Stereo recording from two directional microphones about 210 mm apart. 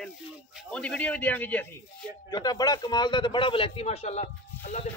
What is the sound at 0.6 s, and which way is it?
A man's voice, 5° left (ahead or behind).